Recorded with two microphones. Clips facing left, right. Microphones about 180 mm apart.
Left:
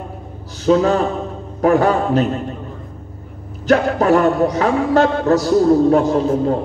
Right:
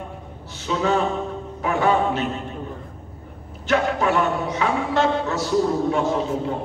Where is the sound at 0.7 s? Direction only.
40° left (ahead or behind).